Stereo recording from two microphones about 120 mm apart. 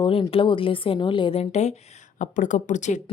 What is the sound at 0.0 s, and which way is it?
A woman's voice, 50° left (ahead or behind).